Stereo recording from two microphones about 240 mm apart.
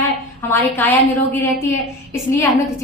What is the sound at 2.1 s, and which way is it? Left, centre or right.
Speech, centre.